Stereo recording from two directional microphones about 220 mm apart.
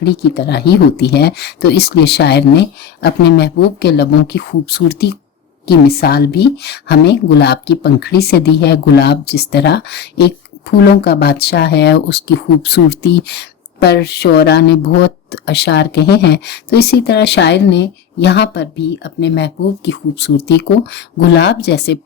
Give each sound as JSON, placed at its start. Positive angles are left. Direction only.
{"t": 0.0, "sound": "speech", "side_deg": 50}